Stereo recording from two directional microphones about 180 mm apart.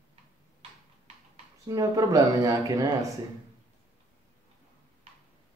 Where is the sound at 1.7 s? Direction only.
20° right (ahead or behind).